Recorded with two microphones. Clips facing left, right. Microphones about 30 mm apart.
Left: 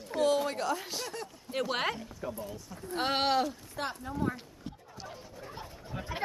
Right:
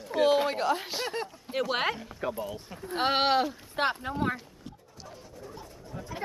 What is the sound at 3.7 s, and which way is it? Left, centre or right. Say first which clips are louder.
Speech: right 8 dB; right.